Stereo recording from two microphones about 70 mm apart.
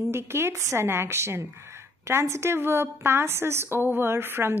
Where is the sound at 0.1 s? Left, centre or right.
Right.